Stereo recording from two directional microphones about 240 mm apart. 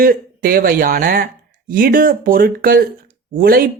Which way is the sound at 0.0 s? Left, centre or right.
Right.